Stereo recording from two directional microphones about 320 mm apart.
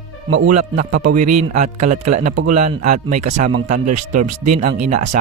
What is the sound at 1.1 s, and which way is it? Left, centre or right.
Speech, right.